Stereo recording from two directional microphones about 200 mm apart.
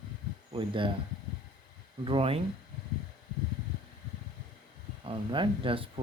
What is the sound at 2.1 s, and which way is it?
Speech, 30° right (ahead or behind).